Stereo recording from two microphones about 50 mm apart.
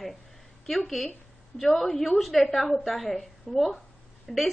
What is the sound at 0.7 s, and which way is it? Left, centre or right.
A woman's voice, centre.